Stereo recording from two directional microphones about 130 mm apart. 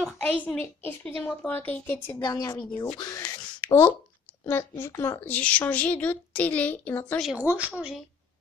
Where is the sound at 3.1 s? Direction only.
25° left (ahead or behind).